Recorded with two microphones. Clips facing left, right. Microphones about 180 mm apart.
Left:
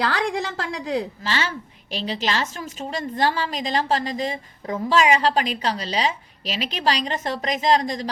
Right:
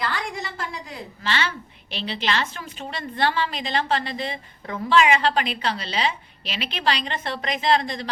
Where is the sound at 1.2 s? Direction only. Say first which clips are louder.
Left 1 dB; 40° left (ahead or behind).